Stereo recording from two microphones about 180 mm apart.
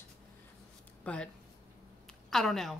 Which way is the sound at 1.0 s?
5° left (ahead or behind).